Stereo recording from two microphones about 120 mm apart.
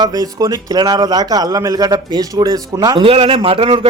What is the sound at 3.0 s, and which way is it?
Speech, 50° right (ahead or behind).